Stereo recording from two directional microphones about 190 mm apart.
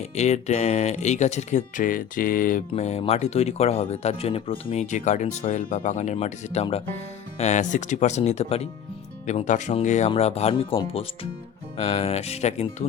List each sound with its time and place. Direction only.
0.2 s speech: 35° left (ahead or behind)